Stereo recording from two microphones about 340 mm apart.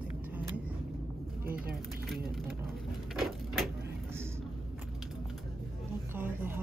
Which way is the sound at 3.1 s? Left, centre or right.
Centre.